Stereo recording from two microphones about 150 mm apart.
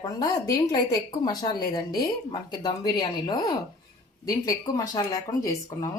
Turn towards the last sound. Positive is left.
turn(degrees=25)  # may be behind; listen again after turning